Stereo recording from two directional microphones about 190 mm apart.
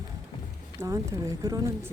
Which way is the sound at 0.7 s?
15° right (ahead or behind).